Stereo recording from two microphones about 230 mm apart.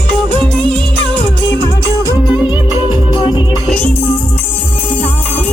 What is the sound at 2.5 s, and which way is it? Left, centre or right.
Music, left.